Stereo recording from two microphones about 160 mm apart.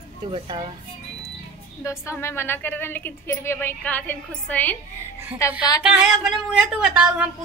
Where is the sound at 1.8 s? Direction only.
15° left (ahead or behind).